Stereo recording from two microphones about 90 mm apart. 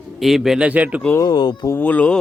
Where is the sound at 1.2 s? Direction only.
50° left (ahead or behind).